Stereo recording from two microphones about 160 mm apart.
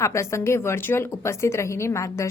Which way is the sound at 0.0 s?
20° left (ahead or behind).